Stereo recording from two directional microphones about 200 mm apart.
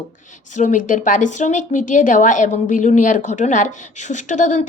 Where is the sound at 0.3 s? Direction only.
35° left (ahead or behind).